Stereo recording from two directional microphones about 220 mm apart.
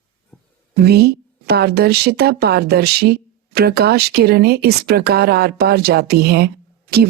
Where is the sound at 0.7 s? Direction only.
45° right (ahead or behind).